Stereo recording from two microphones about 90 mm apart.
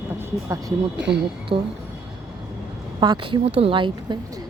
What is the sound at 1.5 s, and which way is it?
Speech, 90° right.